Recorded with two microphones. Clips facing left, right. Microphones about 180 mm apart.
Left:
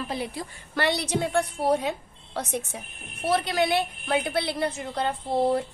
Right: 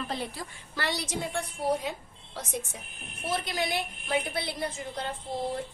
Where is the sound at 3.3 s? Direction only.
65° left (ahead or behind).